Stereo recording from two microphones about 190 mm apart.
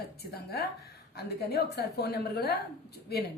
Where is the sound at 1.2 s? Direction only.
55° left (ahead or behind).